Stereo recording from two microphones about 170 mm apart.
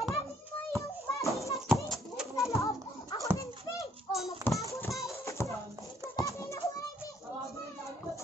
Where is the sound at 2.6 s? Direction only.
20° left (ahead or behind).